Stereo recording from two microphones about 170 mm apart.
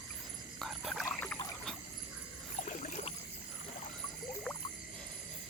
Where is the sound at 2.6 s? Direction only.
45° left (ahead or behind).